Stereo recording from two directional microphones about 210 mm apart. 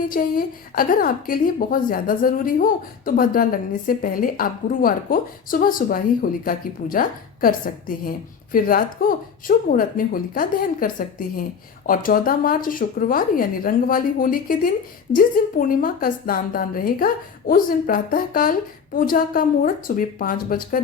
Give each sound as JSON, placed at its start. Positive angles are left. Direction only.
{"t": 0.1, "sound": "a woman's voice", "side_deg": 40}